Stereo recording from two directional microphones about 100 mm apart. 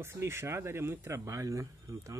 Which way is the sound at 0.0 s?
25° right (ahead or behind).